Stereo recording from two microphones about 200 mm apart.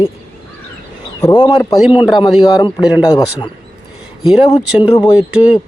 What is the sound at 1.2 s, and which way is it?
Speech, 20° left (ahead or behind).